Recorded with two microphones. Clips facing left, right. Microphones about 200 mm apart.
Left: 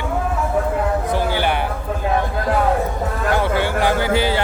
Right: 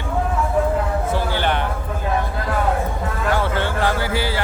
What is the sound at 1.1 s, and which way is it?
Music, 10° left (ahead or behind).